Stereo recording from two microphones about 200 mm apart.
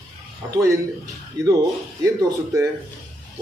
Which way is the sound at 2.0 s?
15° right (ahead or behind).